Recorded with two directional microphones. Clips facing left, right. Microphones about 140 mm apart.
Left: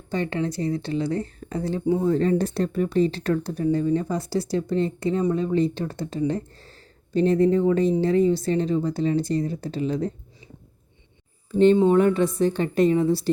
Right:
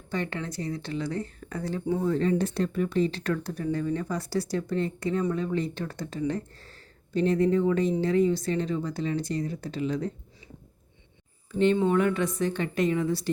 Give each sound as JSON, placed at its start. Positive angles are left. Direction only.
{"t": 0.1, "sound": "speech", "side_deg": 30}
{"t": 2.0, "sound": "speech", "side_deg": 35}
{"t": 11.5, "sound": "speech", "side_deg": 30}